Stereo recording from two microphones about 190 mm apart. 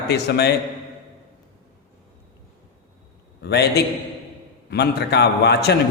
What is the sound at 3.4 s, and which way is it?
A man's voice, 60° left (ahead or behind).